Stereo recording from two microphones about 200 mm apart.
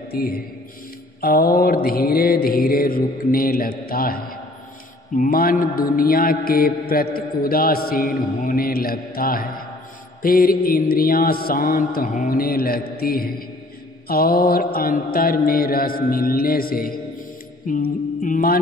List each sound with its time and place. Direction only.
0.1 s speech: 50° left (ahead or behind)
1.2 s mantra: 50° left (ahead or behind)